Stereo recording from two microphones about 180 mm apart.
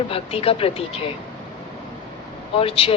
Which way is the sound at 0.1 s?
30° left (ahead or behind).